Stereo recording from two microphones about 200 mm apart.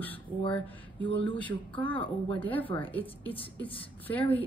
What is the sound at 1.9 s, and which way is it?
Speech, 25° left (ahead or behind).